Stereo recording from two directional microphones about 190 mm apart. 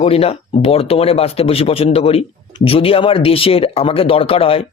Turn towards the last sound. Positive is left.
turn(degrees=30)  # may be behind; listen again after turning